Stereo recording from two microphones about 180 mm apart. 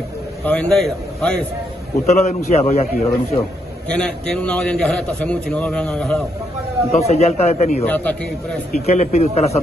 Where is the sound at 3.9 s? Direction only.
5° left (ahead or behind).